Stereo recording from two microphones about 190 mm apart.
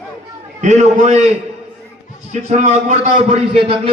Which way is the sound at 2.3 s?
35° right (ahead or behind).